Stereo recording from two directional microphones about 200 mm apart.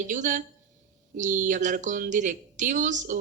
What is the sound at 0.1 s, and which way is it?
Speech, 40° right (ahead or behind).